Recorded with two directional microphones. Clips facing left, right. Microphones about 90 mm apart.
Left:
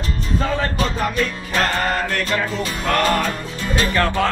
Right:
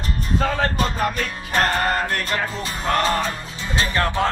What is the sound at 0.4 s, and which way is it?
Music, 45° right (ahead or behind).